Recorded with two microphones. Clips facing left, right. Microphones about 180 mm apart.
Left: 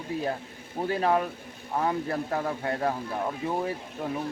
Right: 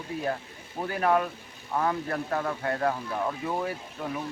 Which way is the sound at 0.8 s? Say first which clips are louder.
Even; 25° left (ahead or behind).